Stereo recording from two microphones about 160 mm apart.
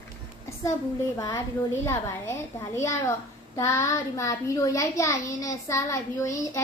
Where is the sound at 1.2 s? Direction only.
20° left (ahead or behind).